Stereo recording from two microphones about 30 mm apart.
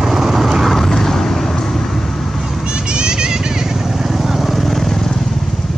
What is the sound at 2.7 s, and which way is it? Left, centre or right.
Vehicle, right.